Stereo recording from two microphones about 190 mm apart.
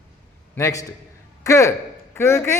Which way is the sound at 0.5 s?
15° left (ahead or behind).